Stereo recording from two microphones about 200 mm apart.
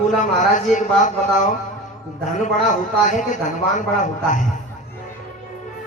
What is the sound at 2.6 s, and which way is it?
A man's voice, 40° left (ahead or behind).